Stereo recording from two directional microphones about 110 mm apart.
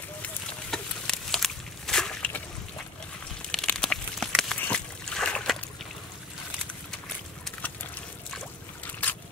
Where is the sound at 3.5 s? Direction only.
5° left (ahead or behind).